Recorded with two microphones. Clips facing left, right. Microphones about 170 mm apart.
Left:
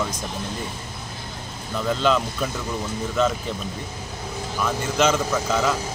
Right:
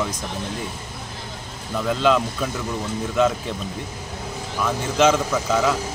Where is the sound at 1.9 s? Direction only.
5° right (ahead or behind).